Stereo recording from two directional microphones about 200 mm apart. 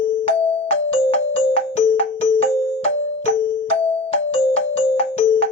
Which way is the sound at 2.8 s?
30° left (ahead or behind).